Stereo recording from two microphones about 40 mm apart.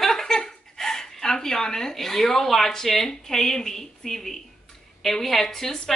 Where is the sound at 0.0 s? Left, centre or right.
Centre.